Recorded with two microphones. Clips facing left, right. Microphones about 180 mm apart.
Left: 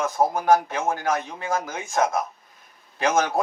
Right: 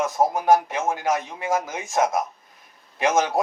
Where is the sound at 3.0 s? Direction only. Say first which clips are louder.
Right 1 dB; 20° right (ahead or behind).